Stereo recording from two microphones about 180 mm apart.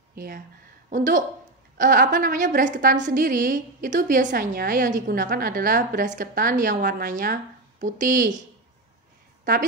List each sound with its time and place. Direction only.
0.1 s speech: 55° right (ahead or behind)
0.8 s a woman's voice: 45° right (ahead or behind)
9.4 s a woman's voice: 50° right (ahead or behind)